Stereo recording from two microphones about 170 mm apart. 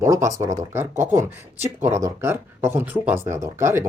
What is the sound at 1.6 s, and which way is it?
Speech, 40° right (ahead or behind).